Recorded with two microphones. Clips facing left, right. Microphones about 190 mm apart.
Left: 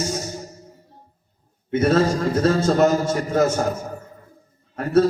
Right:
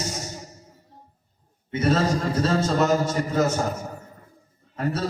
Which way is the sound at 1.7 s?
50° left (ahead or behind).